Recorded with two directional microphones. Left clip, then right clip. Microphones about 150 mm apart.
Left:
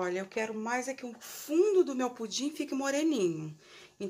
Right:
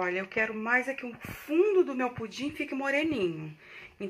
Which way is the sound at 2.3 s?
45° left (ahead or behind).